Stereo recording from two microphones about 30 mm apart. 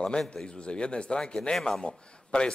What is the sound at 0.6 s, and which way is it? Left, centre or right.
Speech, left.